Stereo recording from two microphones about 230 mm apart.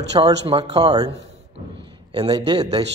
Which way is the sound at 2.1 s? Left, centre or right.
Centre.